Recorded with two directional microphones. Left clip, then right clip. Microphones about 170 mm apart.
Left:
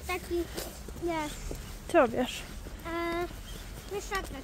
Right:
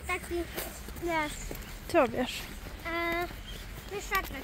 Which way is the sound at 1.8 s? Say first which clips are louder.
Left 2 dB; 15° left (ahead or behind).